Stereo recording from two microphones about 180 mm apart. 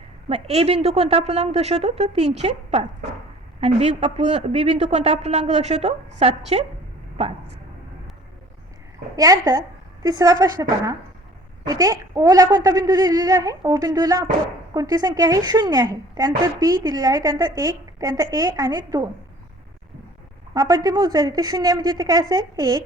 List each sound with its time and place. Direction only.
0.3 s speech: 35° right (ahead or behind)
9.1 s a woman's voice: 20° right (ahead or behind)
20.5 s a woman's voice: 20° right (ahead or behind)